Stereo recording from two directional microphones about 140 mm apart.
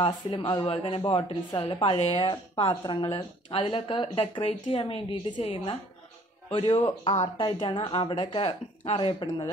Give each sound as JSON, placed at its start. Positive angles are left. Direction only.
{"t": 0.0, "sound": "speech", "side_deg": 35}